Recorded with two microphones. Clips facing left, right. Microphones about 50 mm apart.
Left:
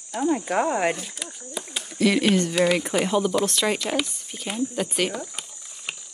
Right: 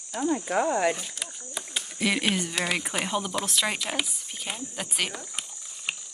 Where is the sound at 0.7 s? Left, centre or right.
Left.